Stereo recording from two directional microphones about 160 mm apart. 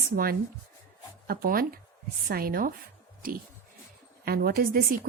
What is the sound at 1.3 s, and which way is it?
A woman's voice, 65° right (ahead or behind).